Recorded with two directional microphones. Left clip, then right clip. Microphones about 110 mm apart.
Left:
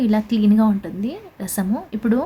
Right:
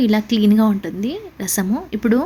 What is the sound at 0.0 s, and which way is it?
A woman's voice, 30° right (ahead or behind).